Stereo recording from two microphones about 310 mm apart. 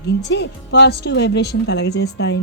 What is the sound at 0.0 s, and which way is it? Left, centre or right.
Speech, left.